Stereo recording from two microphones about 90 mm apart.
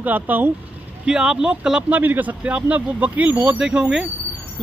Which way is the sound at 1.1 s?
10° right (ahead or behind).